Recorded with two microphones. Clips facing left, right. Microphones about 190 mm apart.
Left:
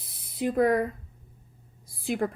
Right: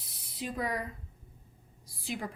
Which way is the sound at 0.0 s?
50° left (ahead or behind).